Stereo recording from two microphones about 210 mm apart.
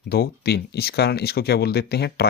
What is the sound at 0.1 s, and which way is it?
Speech, 50° left (ahead or behind).